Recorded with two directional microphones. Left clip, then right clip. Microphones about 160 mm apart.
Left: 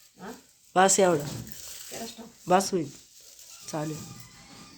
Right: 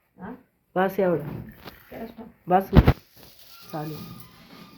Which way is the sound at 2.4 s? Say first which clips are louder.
Right 3 dB; 30° left (ahead or behind).